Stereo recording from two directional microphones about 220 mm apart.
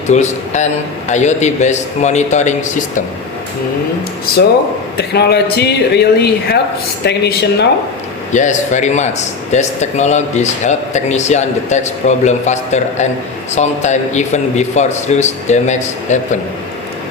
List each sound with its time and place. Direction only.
0.1 s speech: 30° left (ahead or behind)
4.9 s speech: 45° left (ahead or behind)
8.3 s speech: 35° left (ahead or behind)